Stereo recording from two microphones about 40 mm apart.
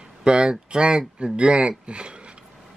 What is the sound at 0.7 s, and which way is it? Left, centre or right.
Speech, centre.